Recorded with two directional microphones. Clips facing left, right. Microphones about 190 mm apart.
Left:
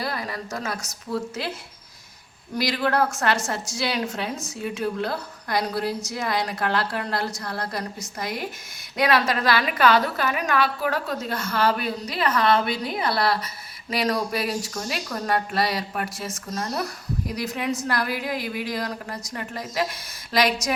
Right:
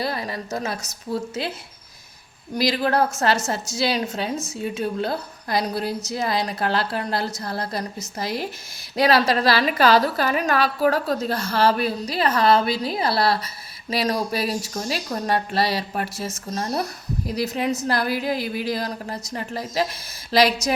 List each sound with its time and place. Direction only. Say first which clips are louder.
0.0 s a sound: right 3 dB; 25° right (ahead or behind)
1.1 s a woman's voice: right 1 dB; 25° right (ahead or behind)
2.6 s a woman's voice: right 2 dB; 25° right (ahead or behind)